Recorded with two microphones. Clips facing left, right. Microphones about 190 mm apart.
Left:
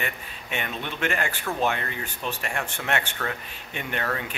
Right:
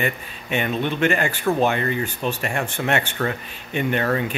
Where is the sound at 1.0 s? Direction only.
Centre (ahead or behind).